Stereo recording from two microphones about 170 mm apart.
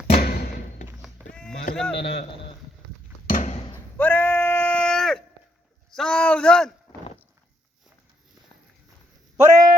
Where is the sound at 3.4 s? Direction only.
35° left (ahead or behind).